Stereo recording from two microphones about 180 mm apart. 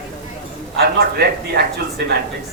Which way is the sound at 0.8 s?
65° right (ahead or behind).